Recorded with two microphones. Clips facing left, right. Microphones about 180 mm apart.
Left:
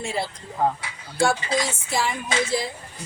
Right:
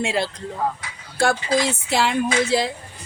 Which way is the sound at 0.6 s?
25° left (ahead or behind).